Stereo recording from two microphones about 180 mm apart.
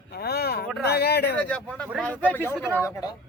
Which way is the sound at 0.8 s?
65° left (ahead or behind).